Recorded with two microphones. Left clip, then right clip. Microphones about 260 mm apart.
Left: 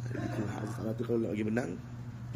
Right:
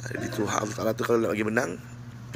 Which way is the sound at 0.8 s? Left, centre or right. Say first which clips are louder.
Right 8 dB; right.